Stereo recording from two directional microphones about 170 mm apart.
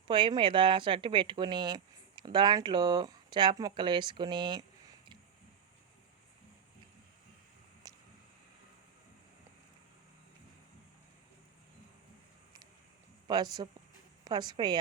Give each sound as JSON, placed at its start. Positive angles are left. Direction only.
{"t": 0.1, "sound": "speech", "side_deg": -30}
{"t": 7.9, "sound": "a sound", "side_deg": -20}
{"t": 13.2, "sound": "speech", "side_deg": -25}